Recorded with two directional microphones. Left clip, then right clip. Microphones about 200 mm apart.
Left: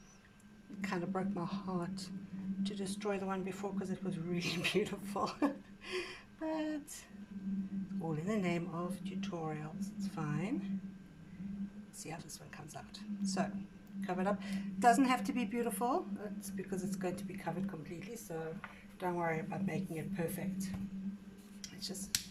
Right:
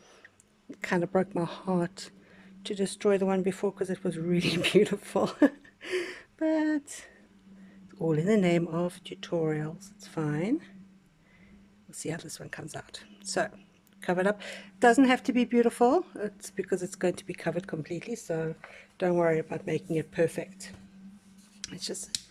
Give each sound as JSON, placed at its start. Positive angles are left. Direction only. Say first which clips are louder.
{"t": 0.7, "sound": "a man's voice", "louder": "right 11 dB", "side_deg": -45}
{"t": 8.0, "sound": "speech", "louder": "right 13 dB", "side_deg": -45}
{"t": 11.9, "sound": "speech", "louder": "right 11 dB", "side_deg": -45}
{"t": 21.6, "sound": "whispering", "louder": "right 8 dB", "side_deg": -45}